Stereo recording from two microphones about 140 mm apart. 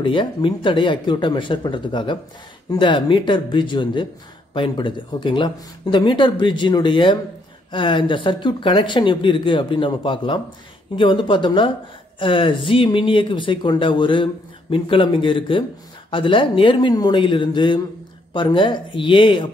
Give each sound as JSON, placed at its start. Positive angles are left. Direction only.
{"t": 0.0, "sound": "speech", "side_deg": 35}